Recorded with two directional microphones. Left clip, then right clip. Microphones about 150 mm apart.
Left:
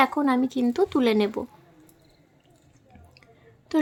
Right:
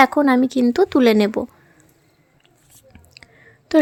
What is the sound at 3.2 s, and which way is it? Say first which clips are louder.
Whispering: right 8 dB; 40° right (ahead or behind).